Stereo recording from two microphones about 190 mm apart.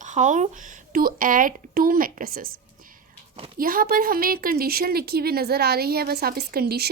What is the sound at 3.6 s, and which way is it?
A woman's voice, 50° right (ahead or behind).